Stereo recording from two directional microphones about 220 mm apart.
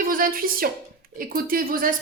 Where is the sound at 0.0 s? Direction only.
40° right (ahead or behind).